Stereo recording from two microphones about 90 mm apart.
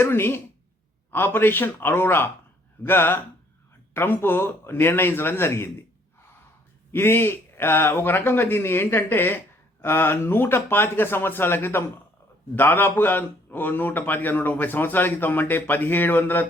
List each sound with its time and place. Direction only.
0.0 s speech: 25° left (ahead or behind)
6.9 s speech: 25° left (ahead or behind)